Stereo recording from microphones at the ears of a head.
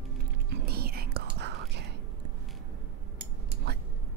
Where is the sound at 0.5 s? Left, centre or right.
Right.